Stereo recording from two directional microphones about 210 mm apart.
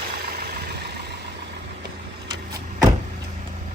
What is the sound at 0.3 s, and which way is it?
Vehicle, 50° right (ahead or behind).